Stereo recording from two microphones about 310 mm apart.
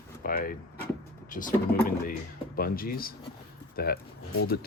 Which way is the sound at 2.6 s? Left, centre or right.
Left.